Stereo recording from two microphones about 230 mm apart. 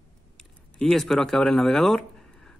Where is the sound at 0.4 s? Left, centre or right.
Centre.